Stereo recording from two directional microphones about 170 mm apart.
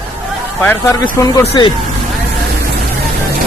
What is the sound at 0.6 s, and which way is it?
Speech, 15° left (ahead or behind).